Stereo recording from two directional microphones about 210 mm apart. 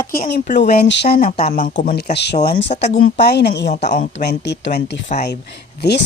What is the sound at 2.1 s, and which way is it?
Speech, 50° left (ahead or behind).